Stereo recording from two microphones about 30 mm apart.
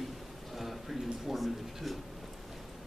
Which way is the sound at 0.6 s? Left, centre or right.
Centre.